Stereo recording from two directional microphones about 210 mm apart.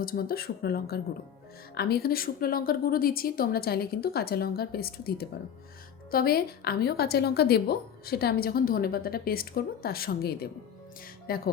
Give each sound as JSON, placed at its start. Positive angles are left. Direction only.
{"t": 0.0, "sound": "a woman's voice", "side_deg": 45}